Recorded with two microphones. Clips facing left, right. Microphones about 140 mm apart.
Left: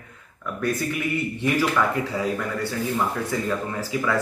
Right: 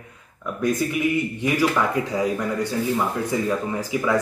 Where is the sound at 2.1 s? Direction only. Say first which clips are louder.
Right 3 dB; 15° right (ahead or behind).